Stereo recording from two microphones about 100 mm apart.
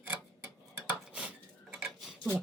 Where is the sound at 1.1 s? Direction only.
10° right (ahead or behind).